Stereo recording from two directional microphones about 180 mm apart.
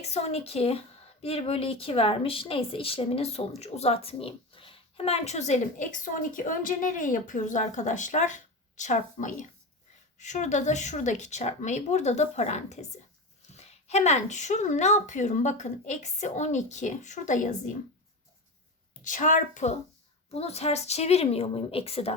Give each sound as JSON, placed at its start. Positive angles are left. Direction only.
{"t": 0.0, "sound": "a woman's voice", "side_deg": 35}
{"t": 19.0, "sound": "a woman's voice", "side_deg": 45}